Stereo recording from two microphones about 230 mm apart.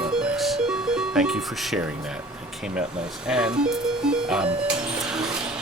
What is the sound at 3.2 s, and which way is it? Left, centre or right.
Speech, centre.